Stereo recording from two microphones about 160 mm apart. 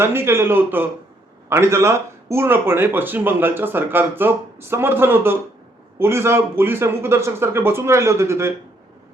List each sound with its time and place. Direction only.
0.0 s speech: 15° right (ahead or behind)